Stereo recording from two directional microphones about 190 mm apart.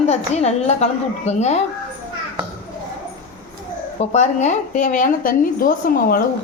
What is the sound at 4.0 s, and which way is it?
A woman's voice, 35° left (ahead or behind).